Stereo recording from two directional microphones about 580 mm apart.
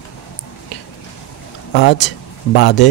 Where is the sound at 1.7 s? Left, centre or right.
Centre.